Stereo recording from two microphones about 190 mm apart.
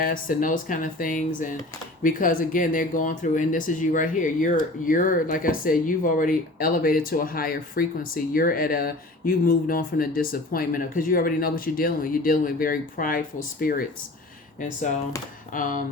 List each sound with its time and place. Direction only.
0.0 s speech: 45° left (ahead or behind)
15.5 s speech: 45° left (ahead or behind)